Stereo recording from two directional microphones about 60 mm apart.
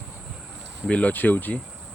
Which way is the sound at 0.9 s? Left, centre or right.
Left.